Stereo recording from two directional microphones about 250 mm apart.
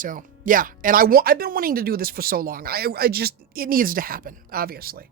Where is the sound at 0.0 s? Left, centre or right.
Right.